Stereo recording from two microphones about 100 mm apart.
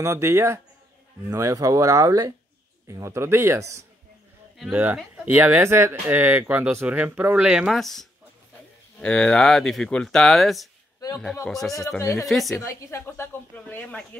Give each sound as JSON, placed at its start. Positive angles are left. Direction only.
{"t": 0.0, "sound": "speech", "side_deg": -30}
{"t": 4.6, "sound": "speech", "side_deg": -15}
{"t": 12.0, "sound": "speech", "side_deg": 35}
{"t": 12.3, "sound": "speech", "side_deg": 0}
{"t": 12.6, "sound": "a woman's voice", "side_deg": 25}